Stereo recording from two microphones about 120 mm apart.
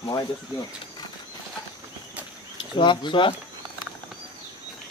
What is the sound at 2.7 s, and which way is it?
Speech, 40° left (ahead or behind).